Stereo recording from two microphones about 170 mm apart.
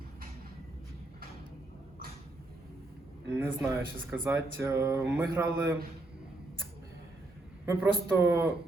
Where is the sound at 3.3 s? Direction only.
10° right (ahead or behind).